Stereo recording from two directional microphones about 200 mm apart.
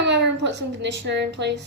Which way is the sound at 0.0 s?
60° right (ahead or behind).